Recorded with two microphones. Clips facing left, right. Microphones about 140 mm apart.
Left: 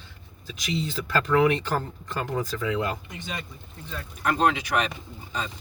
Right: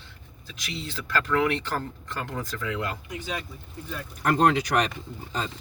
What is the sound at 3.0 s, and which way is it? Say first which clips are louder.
Speech: right 4 dB; 10° right (ahead or behind).